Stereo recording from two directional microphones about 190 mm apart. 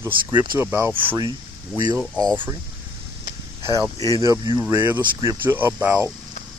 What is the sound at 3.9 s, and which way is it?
Speech, 15° left (ahead or behind).